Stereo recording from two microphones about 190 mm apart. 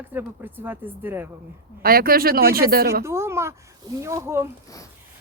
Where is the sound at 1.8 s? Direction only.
50° right (ahead or behind).